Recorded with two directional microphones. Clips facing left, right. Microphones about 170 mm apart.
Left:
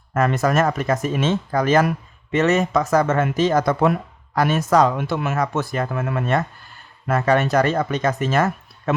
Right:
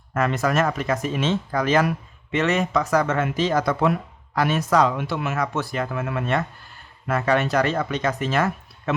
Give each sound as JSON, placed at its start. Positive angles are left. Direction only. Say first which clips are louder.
{"t": 0.1, "sound": "speech", "louder": "left 3 dB", "side_deg": 45}